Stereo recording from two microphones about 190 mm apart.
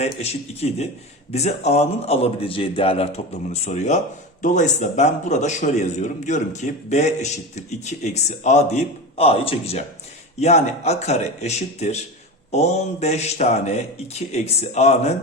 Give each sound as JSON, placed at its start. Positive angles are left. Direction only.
{"t": 0.0, "sound": "a man's voice", "side_deg": 35}